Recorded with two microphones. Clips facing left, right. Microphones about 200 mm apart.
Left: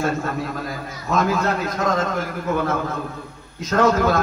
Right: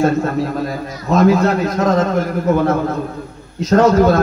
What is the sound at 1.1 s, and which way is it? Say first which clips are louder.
Speech: right 8 dB; 40° right (ahead or behind).